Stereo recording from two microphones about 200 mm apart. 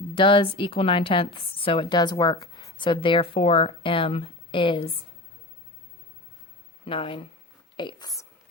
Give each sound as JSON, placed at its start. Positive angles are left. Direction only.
{"t": 0.1, "sound": "a woman's voice", "side_deg": 25}
{"t": 6.8, "sound": "a woman's voice", "side_deg": 25}